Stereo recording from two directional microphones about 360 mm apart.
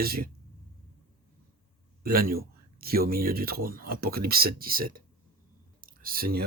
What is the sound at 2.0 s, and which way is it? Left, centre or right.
Speech, right.